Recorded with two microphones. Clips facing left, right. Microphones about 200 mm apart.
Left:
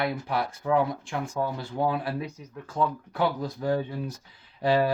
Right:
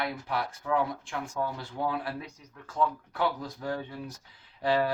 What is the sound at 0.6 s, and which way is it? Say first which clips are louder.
Speech: left 5 dB; 25° left (ahead or behind).